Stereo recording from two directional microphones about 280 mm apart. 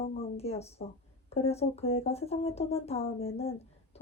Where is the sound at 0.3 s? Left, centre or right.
Left.